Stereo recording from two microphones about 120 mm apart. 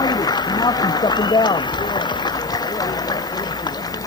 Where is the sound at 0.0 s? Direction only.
35° left (ahead or behind).